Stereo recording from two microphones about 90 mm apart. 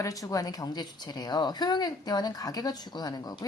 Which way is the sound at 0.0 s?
40° left (ahead or behind).